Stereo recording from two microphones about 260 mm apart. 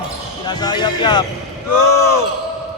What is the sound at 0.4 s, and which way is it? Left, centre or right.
Speech, centre.